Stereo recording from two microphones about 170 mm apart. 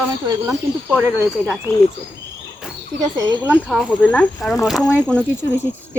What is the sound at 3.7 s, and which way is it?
Speech, 5° left (ahead or behind).